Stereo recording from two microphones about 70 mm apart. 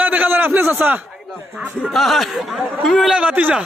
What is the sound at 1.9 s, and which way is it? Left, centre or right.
Speech, centre.